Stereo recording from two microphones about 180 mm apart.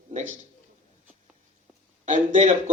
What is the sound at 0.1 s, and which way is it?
Speech, 45° right (ahead or behind).